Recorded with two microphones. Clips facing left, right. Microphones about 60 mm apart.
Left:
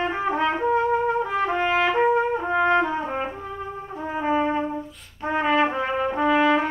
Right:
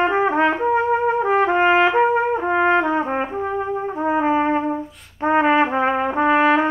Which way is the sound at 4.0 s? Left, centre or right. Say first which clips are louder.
Right 4 dB; right.